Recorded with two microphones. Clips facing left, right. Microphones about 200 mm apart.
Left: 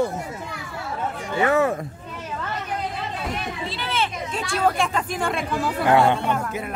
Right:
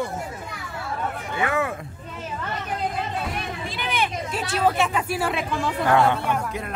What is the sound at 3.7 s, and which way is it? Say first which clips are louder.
Children playing: right 2 dB; 15° right (ahead or behind).